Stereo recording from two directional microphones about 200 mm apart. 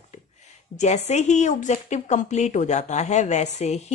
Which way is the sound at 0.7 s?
35° left (ahead or behind).